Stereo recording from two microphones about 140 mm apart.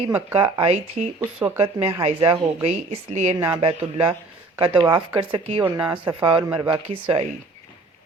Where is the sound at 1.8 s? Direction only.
45° right (ahead or behind).